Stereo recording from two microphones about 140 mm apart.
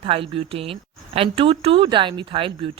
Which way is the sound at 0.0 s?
40° right (ahead or behind).